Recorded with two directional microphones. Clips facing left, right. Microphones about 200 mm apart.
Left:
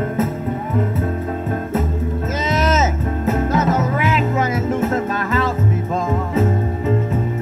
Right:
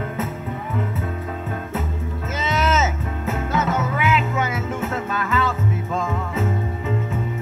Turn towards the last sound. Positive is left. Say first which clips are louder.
# left 6 dB
turn(degrees=40)  # may be behind; listen again after turning